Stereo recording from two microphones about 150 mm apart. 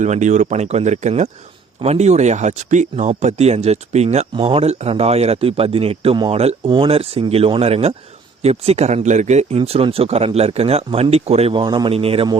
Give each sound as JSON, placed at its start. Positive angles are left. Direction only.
{"t": 0.0, "sound": "speech", "side_deg": -55}